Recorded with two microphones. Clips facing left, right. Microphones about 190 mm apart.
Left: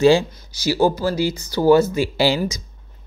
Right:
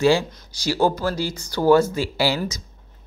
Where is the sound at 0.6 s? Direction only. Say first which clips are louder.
Left 3 dB; 5° left (ahead or behind).